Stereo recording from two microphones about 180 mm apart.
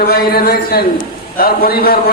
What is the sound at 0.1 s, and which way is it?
A man's voice, 55° left (ahead or behind).